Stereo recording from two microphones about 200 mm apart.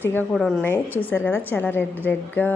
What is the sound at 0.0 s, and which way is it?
A woman's voice, 10° left (ahead or behind).